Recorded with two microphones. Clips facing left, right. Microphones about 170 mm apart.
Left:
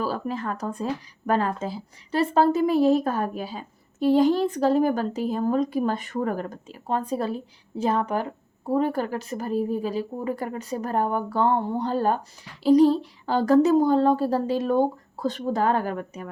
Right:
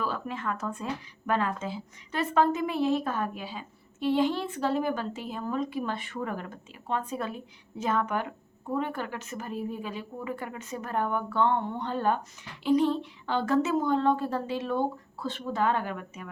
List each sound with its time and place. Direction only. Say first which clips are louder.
0.0 s a woman's voice: left 5 dB; 35° left (ahead or behind)